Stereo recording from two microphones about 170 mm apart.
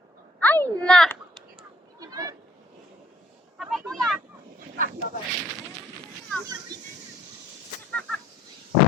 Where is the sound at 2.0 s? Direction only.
20° right (ahead or behind).